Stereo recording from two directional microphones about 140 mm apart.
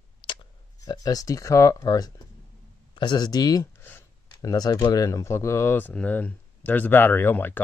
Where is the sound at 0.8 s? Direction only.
25° left (ahead or behind).